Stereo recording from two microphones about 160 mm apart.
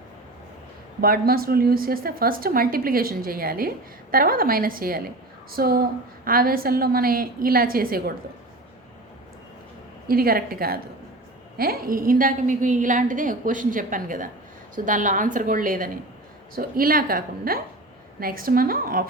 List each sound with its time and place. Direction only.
1.0 s a woman's voice: 70° right (ahead or behind)
10.1 s a woman's voice: 65° right (ahead or behind)